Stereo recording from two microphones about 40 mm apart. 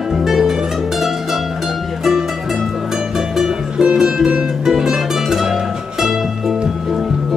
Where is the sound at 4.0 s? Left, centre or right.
Centre.